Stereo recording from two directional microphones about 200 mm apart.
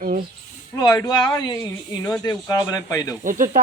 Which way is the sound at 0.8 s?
20° left (ahead or behind).